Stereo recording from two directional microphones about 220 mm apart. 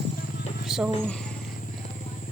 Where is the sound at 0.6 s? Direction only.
Centre (ahead or behind).